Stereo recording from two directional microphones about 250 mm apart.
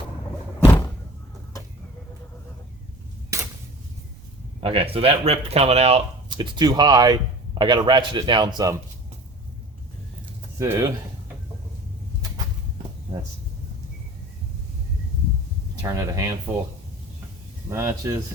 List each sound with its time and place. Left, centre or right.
3.3 s a sound: centre
4.6 s speech: right
10.6 s speech: centre
15.8 s speech: centre
17.7 s speech: centre